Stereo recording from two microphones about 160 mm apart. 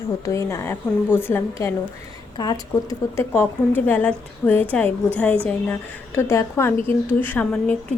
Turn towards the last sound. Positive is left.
turn(degrees=10)  # may be behind; listen again after turning